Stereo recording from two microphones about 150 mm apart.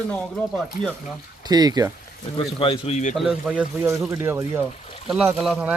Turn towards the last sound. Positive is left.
turn(degrees=-5)  # may be behind; listen again after turning